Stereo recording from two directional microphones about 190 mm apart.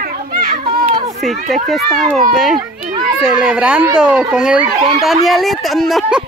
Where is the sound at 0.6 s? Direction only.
35° right (ahead or behind).